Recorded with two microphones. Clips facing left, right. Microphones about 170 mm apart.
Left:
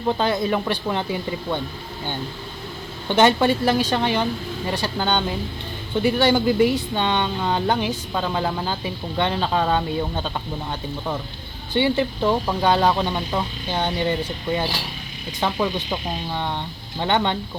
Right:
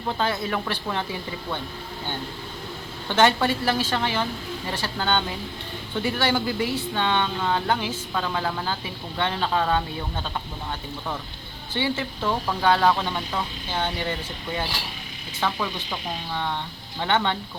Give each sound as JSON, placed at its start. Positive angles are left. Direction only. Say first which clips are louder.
{"t": 0.2, "sound": "speech", "louder": "left 5 dB", "side_deg": 20}
{"t": 3.1, "sound": "speech", "louder": "left 4 dB", "side_deg": 20}
{"t": 11.7, "sound": "speech", "louder": "left 7 dB", "side_deg": 20}